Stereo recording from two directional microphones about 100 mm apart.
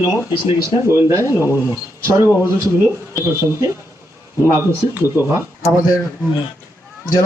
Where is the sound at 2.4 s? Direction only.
25° right (ahead or behind).